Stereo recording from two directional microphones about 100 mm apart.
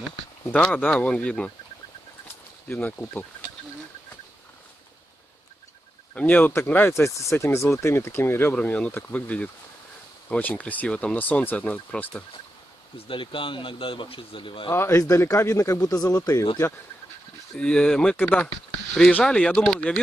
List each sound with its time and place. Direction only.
0.7 s speech: 15° left (ahead or behind)
2.7 s speech: 20° left (ahead or behind)
6.1 s speech: 15° left (ahead or behind)
12.9 s speech: 60° left (ahead or behind)
14.7 s speech: 30° left (ahead or behind)
17.6 s speech: 10° left (ahead or behind)